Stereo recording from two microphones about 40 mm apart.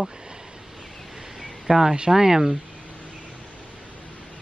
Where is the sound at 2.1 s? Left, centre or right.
Centre.